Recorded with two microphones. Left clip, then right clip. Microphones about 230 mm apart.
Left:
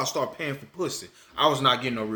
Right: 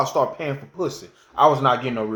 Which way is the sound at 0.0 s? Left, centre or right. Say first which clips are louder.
Right 7 dB; centre.